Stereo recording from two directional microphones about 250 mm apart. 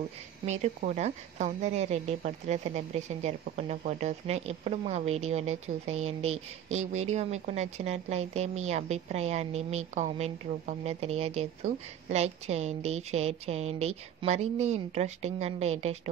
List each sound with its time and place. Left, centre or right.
0.5 s a woman's voice: right